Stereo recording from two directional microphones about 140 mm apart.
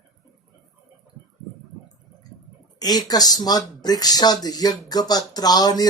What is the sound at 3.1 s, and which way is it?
Speech, 25° left (ahead or behind).